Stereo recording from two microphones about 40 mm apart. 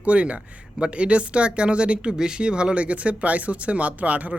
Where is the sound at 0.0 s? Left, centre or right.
Right.